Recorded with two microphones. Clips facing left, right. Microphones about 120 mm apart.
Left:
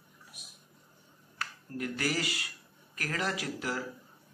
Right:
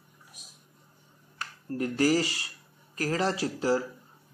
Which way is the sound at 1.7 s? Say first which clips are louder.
Right 9 dB; 35° right (ahead or behind).